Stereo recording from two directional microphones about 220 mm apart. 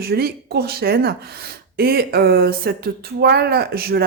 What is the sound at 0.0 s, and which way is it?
Speech, 45° right (ahead or behind).